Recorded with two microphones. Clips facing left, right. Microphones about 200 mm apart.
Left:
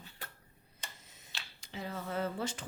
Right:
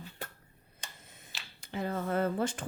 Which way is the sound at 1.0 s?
55° right (ahead or behind).